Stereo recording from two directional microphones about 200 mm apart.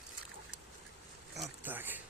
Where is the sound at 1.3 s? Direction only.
10° right (ahead or behind).